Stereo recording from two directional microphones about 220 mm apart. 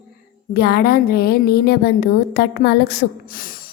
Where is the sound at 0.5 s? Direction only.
45° left (ahead or behind).